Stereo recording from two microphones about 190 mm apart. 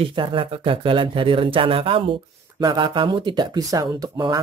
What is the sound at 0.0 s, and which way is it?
Speech, 25° right (ahead or behind).